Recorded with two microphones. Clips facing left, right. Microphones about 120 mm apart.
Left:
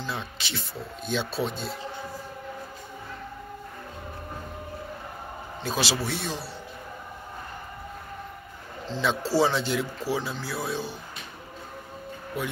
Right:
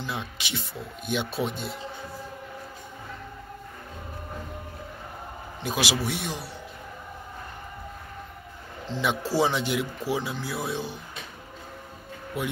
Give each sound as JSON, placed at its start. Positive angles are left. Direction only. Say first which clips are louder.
{"t": 0.0, "sound": "speech", "louder": "even", "side_deg": -15}
{"t": 5.6, "sound": "speech", "louder": "even", "side_deg": -15}
{"t": 8.8, "sound": "speech", "louder": "even", "side_deg": -15}